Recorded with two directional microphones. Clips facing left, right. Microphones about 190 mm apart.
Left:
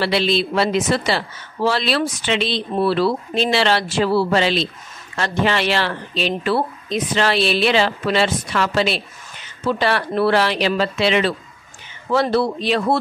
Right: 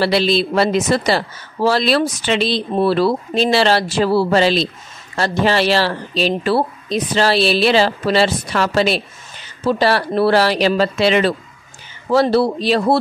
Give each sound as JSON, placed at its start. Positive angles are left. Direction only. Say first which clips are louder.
{"t": 0.0, "sound": "speech", "louder": "right 3 dB", "side_deg": -40}